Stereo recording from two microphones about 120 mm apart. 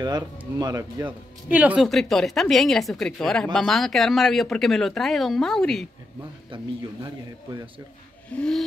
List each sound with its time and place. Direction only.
0.6 s speech: 30° right (ahead or behind)
1.5 s speech: 15° right (ahead or behind)
1.8 s speech: centre (ahead or behind)
6.5 s speech: 45° right (ahead or behind)
8.3 s a sound: 5° left (ahead or behind)